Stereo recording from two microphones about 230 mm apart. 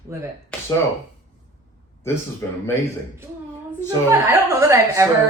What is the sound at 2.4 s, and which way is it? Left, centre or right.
Speech, centre.